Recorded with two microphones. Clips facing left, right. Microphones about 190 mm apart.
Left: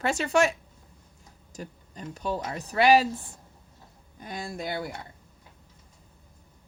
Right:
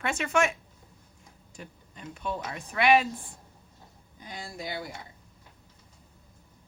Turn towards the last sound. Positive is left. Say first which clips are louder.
# left 4 dB
turn(degrees=55)  # may be behind; listen again after turning